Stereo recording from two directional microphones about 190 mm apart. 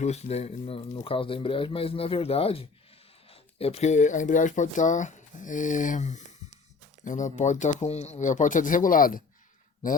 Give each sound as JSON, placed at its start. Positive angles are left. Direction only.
{"t": 0.0, "sound": "speech", "side_deg": 35}